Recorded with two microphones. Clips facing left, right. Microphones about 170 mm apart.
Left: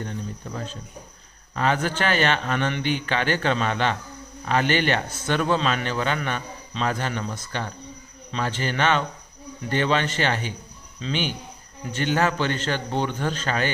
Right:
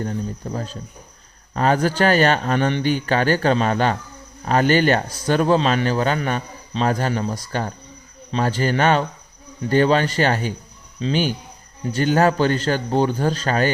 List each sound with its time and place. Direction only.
0.0 s a man's voice: 40° right (ahead or behind)